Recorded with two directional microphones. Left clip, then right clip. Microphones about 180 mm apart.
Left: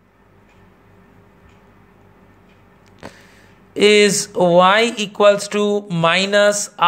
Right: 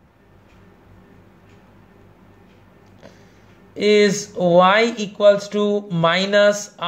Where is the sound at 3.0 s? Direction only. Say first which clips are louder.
Left 8 dB; 30° left (ahead or behind).